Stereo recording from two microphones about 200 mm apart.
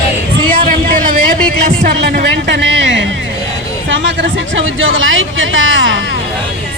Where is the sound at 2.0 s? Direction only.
55° right (ahead or behind).